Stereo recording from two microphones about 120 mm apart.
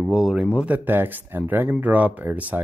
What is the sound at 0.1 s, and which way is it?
Speech, 5° right (ahead or behind).